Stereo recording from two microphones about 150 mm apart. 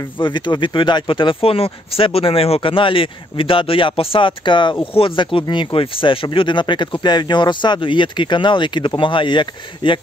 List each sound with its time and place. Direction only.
0.2 s speech: 30° left (ahead or behind)